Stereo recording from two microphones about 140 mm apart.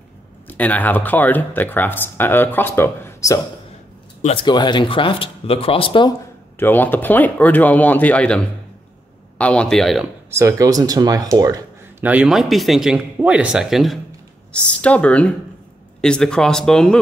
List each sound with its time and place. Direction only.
0.5 s speech: 10° left (ahead or behind)
4.2 s speech: 45° left (ahead or behind)
4.5 s speech: 30° left (ahead or behind)
6.6 s speech: 15° left (ahead or behind)
10.3 s speech: 20° right (ahead or behind)
12.0 s speech: 10° right (ahead or behind)
14.5 s speech: 10° left (ahead or behind)